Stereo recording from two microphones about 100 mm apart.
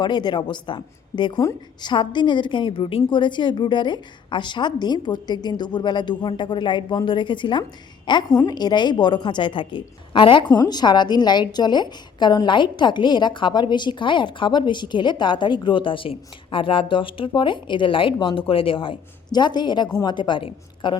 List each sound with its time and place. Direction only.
0.0 s a woman's voice: 45° left (ahead or behind)
10.5 s a woman's voice: 45° left (ahead or behind); by 18.9 s 60° left (ahead or behind)
19.3 s a woman's voice: 50° left (ahead or behind)